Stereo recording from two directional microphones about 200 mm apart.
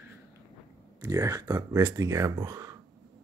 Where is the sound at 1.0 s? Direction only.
15° right (ahead or behind).